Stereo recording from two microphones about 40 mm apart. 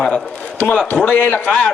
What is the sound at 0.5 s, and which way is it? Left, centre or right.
A man's voice, left.